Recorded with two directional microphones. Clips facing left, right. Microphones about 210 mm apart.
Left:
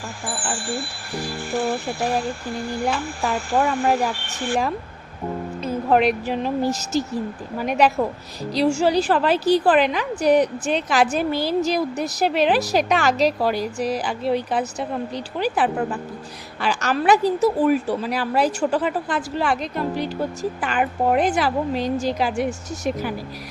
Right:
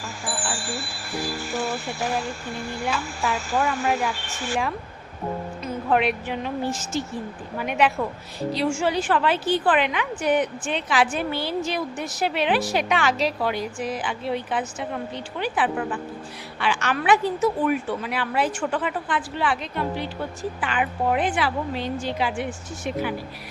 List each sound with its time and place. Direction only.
0.5 s bicycle bell: 55° left (ahead or behind)
1.5 s speech: 55° left (ahead or behind)
3.6 s a woman's voice: 35° left (ahead or behind)
5.6 s a woman's voice: 40° left (ahead or behind)